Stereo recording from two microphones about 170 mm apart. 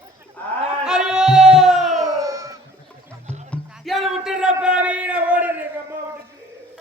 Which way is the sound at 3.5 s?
Centre (ahead or behind).